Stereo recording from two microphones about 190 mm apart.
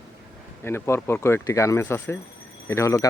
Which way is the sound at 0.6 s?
15° left (ahead or behind).